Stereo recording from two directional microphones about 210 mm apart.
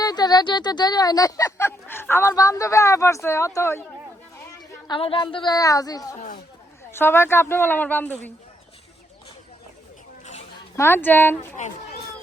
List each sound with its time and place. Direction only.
0.0 s speech: 20° left (ahead or behind)
4.9 s a woman's voice: 25° left (ahead or behind)
6.1 s speech: 35° left (ahead or behind)
6.9 s speech: 10° left (ahead or behind)
10.8 s speech: 10° left (ahead or behind)